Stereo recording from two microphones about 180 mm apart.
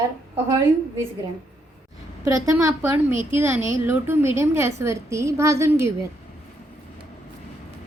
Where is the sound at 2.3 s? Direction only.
15° right (ahead or behind).